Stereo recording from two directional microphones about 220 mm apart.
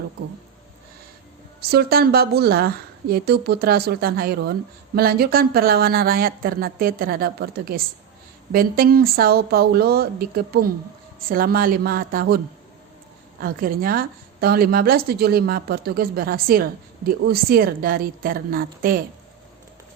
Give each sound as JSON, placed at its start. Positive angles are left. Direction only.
{"t": 1.7, "sound": "a woman's voice", "side_deg": -45}
{"t": 13.4, "sound": "a woman's voice", "side_deg": -40}